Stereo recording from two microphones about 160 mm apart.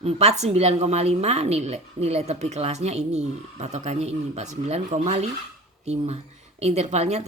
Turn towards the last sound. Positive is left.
turn(degrees=-45)  # may be behind; listen again after turning